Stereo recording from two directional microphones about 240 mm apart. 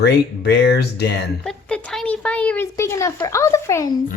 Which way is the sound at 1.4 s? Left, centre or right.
Centre.